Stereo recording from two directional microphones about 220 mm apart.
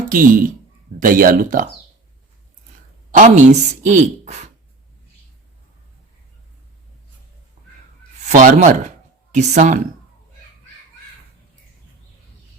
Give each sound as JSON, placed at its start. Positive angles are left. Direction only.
{"t": 0.1, "sound": "a woman's voice", "side_deg": -40}
{"t": 3.1, "sound": "a woman's voice", "side_deg": -35}
{"t": 8.3, "sound": "a woman's voice", "side_deg": -35}